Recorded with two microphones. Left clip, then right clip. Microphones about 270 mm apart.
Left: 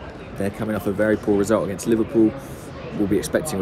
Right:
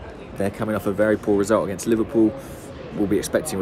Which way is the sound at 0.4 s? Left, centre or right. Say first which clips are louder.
Right 1 dB; centre.